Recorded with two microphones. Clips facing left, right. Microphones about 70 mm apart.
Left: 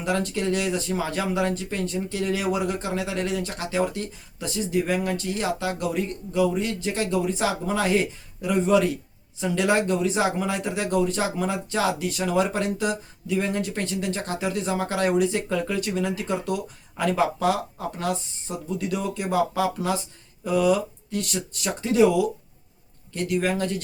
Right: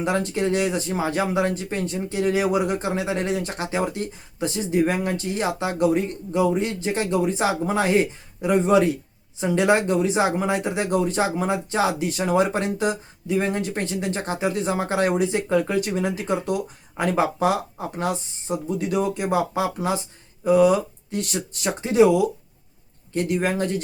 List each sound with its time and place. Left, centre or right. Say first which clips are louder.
0.0 s speech: right 2 dB; right